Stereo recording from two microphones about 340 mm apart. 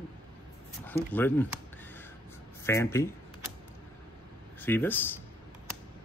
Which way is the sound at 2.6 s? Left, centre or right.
Centre.